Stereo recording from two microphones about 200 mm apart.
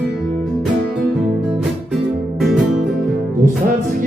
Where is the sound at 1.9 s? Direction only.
Centre (ahead or behind).